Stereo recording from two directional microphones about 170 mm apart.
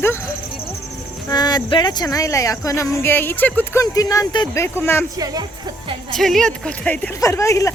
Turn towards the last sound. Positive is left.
turn(degrees=20)  # may be behind; listen again after turning